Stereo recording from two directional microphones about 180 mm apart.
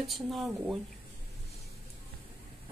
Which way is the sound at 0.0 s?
Centre (ahead or behind).